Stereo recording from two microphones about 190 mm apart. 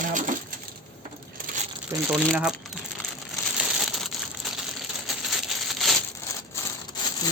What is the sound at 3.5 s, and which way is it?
Crumpling, centre (ahead or behind).